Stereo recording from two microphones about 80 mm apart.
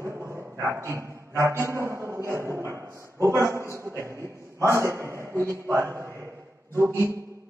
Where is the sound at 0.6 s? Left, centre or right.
Right.